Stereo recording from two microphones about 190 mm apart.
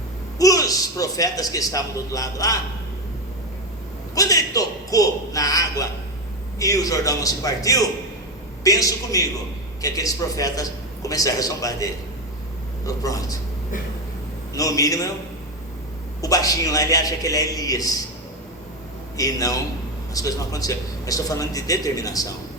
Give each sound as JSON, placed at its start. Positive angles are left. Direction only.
{"t": 0.3, "sound": "a man's voice", "side_deg": 20}
{"t": 4.1, "sound": "a man's voice", "side_deg": 20}
{"t": 14.5, "sound": "a man's voice", "side_deg": 20}
{"t": 16.2, "sound": "a man's voice", "side_deg": 20}
{"t": 19.1, "sound": "a man's voice", "side_deg": 20}